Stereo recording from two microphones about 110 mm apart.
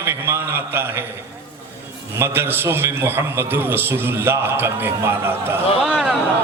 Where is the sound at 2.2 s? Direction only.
20° right (ahead or behind).